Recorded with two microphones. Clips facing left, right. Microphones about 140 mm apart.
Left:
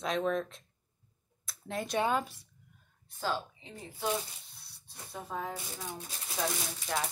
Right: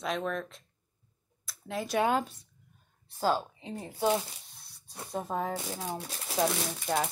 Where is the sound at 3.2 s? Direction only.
40° right (ahead or behind).